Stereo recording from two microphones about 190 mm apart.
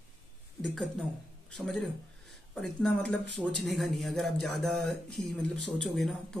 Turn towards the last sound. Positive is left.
turn(degrees=5)  # may be behind; listen again after turning